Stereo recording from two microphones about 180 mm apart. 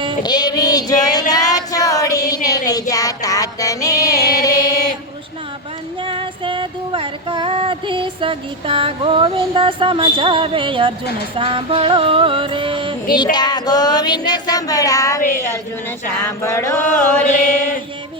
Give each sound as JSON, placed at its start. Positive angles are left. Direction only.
{"t": 0.2, "sound": "a sound", "side_deg": 20}
{"t": 1.3, "sound": "female singing", "side_deg": 20}
{"t": 2.3, "sound": "music", "side_deg": 20}
{"t": 6.0, "sound": "music", "side_deg": -30}
{"t": 13.3, "sound": "a sound", "side_deg": 25}
{"t": 15.2, "sound": "a woman's voice", "side_deg": 45}
{"t": 16.0, "sound": "music", "side_deg": 15}